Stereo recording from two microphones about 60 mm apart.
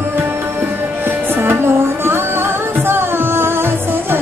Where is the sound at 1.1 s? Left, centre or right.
Right.